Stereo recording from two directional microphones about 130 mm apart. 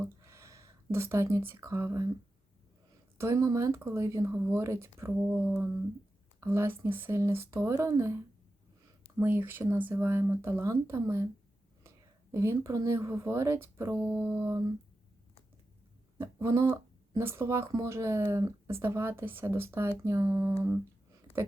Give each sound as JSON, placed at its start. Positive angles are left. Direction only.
{"t": 0.2, "sound": "speech", "side_deg": -20}
{"t": 3.2, "sound": "speech", "side_deg": -25}
{"t": 12.3, "sound": "speech", "side_deg": -20}
{"t": 16.1, "sound": "speech", "side_deg": -20}